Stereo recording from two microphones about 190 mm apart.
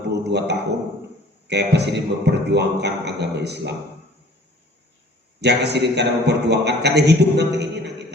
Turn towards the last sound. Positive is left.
turn(degrees=-60)  # may be behind; listen again after turning